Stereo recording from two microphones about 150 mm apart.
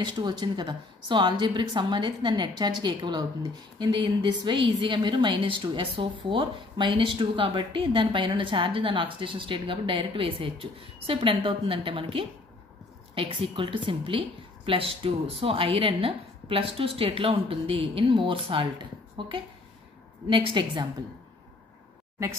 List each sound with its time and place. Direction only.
0.0 s a woman's voice: 30° right (ahead or behind)